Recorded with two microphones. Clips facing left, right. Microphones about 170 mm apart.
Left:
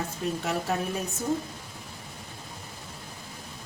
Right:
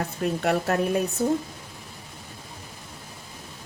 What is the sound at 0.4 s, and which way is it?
Speech, 70° right (ahead or behind).